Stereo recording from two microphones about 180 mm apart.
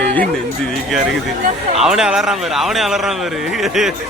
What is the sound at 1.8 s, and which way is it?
Speech, 5° right (ahead or behind).